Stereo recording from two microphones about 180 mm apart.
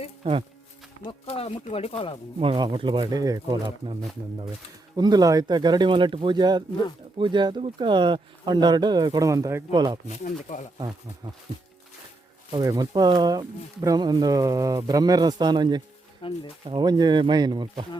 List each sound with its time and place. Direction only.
0.2 s speech: 30° right (ahead or behind)
1.2 s speech: 35° left (ahead or behind)
2.4 s speech: 25° right (ahead or behind)
4.9 s speech: 20° right (ahead or behind)
10.2 s speech: 45° left (ahead or behind)
12.5 s speech: 25° right (ahead or behind)
16.2 s speech: 30° left (ahead or behind)
16.6 s speech: 25° right (ahead or behind)